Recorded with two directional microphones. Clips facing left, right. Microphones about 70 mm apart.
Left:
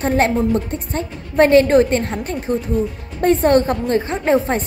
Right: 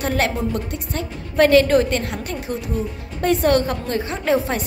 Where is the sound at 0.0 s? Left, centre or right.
Left.